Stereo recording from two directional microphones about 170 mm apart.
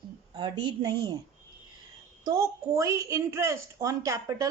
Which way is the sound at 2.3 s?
20° right (ahead or behind).